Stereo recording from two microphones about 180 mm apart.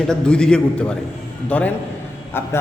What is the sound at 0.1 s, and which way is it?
A man's voice, 5° left (ahead or behind).